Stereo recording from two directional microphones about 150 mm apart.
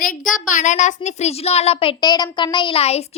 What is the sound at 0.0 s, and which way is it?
A woman's voice, 65° left (ahead or behind).